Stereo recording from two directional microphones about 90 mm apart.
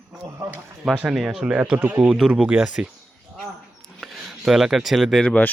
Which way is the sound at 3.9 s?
5° right (ahead or behind).